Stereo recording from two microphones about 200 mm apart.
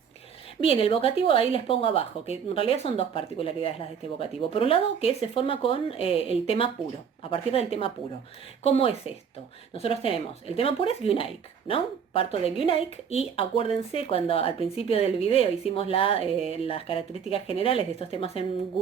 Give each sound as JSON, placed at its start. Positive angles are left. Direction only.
{"t": 0.6, "sound": "speech", "side_deg": 25}